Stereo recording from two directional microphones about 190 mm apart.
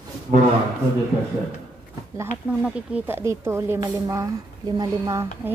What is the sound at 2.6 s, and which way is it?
Speech, 5° right (ahead or behind).